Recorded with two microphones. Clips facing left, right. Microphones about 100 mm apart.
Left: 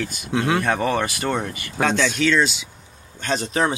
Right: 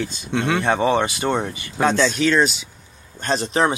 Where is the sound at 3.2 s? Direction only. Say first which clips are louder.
Right 2 dB; 35° right (ahead or behind).